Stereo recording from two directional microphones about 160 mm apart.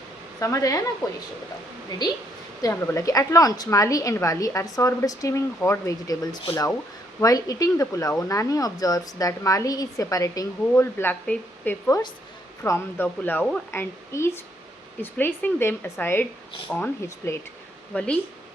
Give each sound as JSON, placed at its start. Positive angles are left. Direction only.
{"t": 0.3, "sound": "speech", "side_deg": 20}
{"t": 2.6, "sound": "a woman's voice", "side_deg": 20}